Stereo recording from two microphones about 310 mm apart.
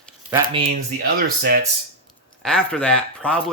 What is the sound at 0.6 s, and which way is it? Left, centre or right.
Speech, right.